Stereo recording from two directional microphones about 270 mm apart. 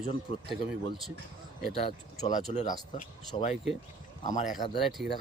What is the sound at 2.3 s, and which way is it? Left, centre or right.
Speech, left.